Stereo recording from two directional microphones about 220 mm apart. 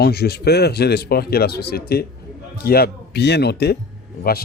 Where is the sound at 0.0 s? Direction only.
45° left (ahead or behind).